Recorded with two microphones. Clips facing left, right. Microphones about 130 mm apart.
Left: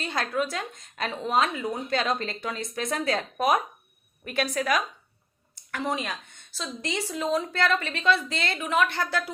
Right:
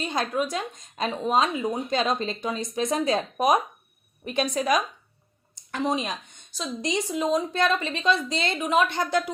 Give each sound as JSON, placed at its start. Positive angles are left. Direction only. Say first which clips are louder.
{"t": 0.0, "sound": "a woman's voice", "louder": "right 2 dB", "side_deg": -20}